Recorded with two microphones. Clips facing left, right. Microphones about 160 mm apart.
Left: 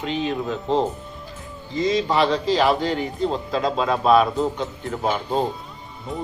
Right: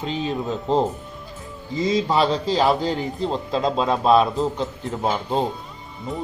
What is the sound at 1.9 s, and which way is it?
A man's voice, 30° right (ahead or behind).